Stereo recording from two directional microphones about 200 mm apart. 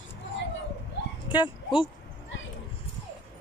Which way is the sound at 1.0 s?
60° left (ahead or behind).